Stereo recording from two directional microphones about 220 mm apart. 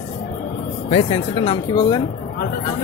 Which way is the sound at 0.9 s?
25° left (ahead or behind).